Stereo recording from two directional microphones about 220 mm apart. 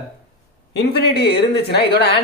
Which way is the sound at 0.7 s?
50° left (ahead or behind).